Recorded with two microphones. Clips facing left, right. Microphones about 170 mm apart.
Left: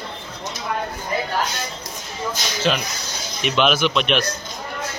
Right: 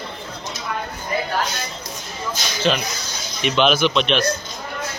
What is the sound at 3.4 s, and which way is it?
Speech, centre (ahead or behind).